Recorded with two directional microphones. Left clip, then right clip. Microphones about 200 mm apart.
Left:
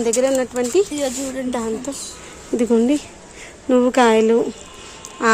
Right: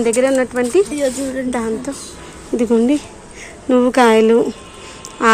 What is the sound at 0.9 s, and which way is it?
Speech, 50° left (ahead or behind).